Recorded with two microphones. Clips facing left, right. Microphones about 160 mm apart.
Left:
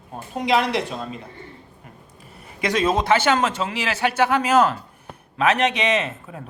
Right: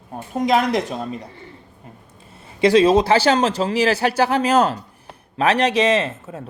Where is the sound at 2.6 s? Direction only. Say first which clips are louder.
Right 7 dB; 30° right (ahead or behind).